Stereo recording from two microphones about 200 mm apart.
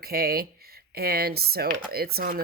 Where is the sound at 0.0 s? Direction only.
50° right (ahead or behind).